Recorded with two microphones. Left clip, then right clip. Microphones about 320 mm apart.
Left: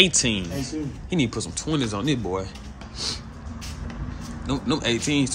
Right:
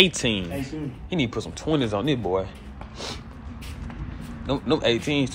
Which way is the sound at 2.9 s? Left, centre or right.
Centre.